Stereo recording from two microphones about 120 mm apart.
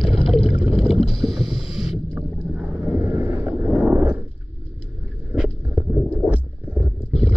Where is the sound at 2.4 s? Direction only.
15° right (ahead or behind).